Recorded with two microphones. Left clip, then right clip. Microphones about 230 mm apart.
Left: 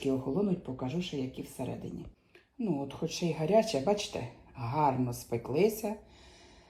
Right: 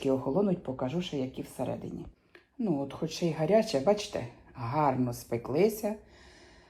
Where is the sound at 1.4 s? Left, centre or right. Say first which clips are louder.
Right 4 dB; right.